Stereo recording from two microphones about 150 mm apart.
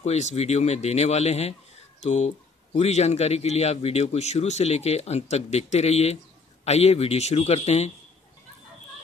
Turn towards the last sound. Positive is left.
turn(degrees=45)  # may be behind; listen again after turning